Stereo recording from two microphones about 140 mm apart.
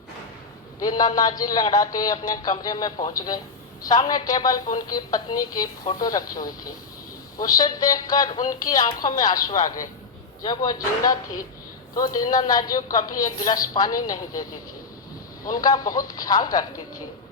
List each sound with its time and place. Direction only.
0.8 s a woman's voice: 30° left (ahead or behind)
15.4 s a woman's voice: 30° left (ahead or behind)